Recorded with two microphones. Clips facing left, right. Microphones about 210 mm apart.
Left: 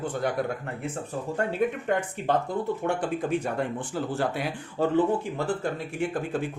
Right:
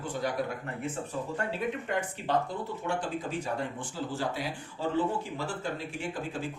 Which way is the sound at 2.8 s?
60° left (ahead or behind).